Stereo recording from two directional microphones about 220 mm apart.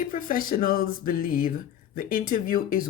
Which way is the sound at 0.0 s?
40° left (ahead or behind).